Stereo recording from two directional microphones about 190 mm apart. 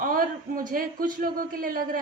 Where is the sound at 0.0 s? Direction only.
45° right (ahead or behind).